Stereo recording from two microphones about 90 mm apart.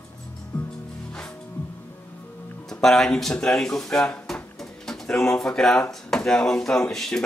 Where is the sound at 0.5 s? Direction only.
20° left (ahead or behind).